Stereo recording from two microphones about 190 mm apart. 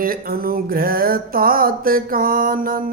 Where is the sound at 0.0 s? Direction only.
50° right (ahead or behind).